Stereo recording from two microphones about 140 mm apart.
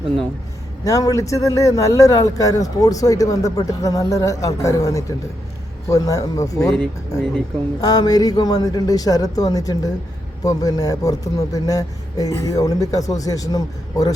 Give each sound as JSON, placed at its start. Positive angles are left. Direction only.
{"t": 0.9, "sound": "speech", "side_deg": 25}
{"t": 7.8, "sound": "speech", "side_deg": 30}